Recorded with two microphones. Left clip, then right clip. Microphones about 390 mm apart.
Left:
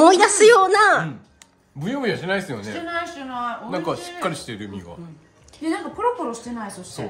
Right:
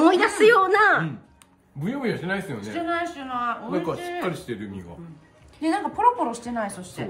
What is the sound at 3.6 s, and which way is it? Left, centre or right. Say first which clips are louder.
Speech: left 1 dB; left.